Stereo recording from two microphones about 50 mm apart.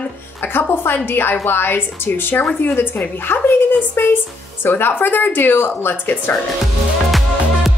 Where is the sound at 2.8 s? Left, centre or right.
Left.